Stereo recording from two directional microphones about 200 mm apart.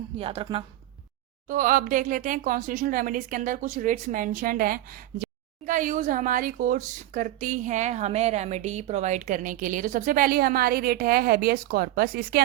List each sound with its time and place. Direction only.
0.2 s speech: 25° right (ahead or behind)
1.5 s speech: 40° right (ahead or behind)